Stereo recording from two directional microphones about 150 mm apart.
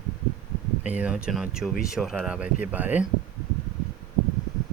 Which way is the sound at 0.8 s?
10° right (ahead or behind).